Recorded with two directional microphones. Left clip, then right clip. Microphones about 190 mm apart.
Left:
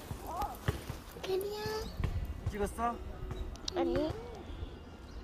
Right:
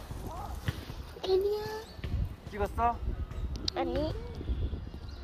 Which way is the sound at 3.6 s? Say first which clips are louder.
Right 1 dB; 5° right (ahead or behind).